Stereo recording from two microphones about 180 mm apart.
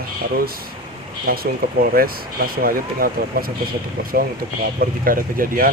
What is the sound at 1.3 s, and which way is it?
Speech, 55° right (ahead or behind).